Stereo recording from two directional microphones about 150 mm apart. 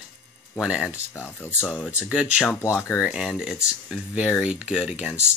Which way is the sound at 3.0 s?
5° right (ahead or behind).